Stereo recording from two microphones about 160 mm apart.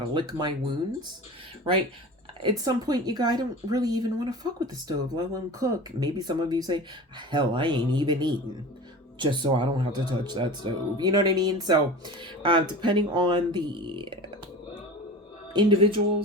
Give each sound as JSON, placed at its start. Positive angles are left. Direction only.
{"t": 0.1, "sound": "speech", "side_deg": -30}
{"t": 2.4, "sound": "speech", "side_deg": -25}
{"t": 15.5, "sound": "speech", "side_deg": -35}